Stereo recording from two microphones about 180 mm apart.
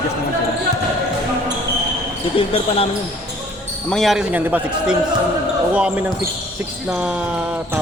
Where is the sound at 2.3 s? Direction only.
30° left (ahead or behind).